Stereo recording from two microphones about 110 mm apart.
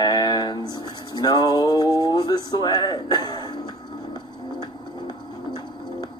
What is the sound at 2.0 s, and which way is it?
Music, 35° left (ahead or behind).